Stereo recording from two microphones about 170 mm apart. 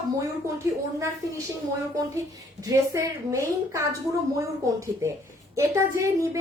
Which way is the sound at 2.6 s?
20° right (ahead or behind).